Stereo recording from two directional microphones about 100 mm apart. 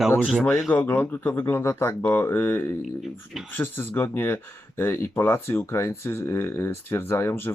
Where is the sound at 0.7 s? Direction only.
20° left (ahead or behind).